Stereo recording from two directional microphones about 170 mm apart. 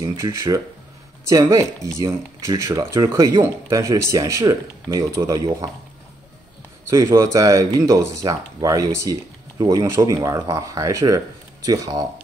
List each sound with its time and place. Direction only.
0.0 s speech: 20° right (ahead or behind)
6.9 s speech: 20° right (ahead or behind)